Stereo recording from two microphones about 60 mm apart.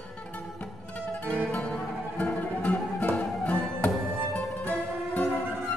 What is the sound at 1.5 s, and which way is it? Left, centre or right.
Music, left.